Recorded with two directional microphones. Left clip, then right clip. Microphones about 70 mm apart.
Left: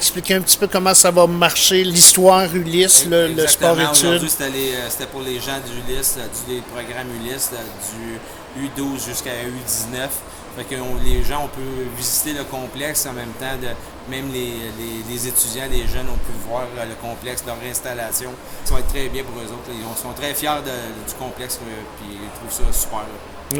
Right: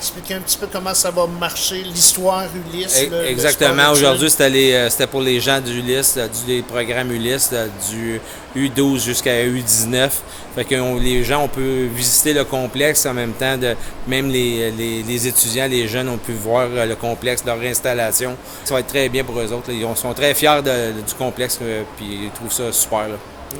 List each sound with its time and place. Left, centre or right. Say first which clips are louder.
0.0 s speech: left 7 dB; left
3.6 s speech: right 5 dB; right
8.6 s speech: right 9 dB; right